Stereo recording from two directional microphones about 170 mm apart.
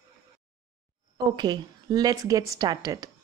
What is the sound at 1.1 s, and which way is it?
Speech, 25° right (ahead or behind).